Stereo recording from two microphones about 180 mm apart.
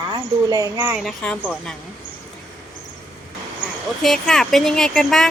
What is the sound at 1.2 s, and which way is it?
Speech, 5° left (ahead or behind).